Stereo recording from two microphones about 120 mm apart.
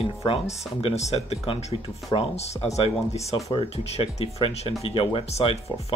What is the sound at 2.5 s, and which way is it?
Speech, 65° left (ahead or behind).